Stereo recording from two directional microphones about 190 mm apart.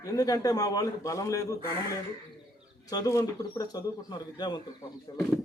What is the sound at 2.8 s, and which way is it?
Speech, 20° left (ahead or behind).